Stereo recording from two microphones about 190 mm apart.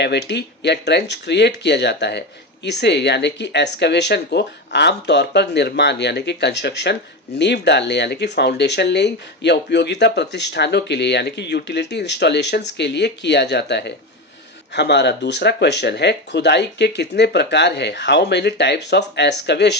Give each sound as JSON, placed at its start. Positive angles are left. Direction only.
{"t": 0.0, "sound": "speech", "side_deg": 65}